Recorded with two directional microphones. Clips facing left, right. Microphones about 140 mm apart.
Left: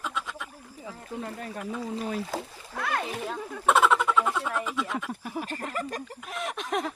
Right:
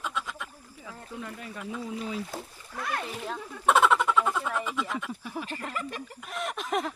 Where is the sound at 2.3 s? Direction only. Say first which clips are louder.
Left 5 dB; 85° left.